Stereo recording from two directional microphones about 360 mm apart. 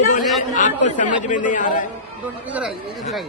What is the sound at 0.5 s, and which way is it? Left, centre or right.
Chatter, left.